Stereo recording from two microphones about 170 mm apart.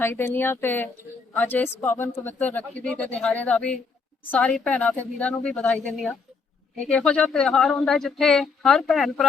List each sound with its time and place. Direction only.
0.0 s speech: 15° left (ahead or behind)